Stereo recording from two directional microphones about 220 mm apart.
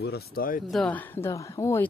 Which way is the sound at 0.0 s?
45° left (ahead or behind).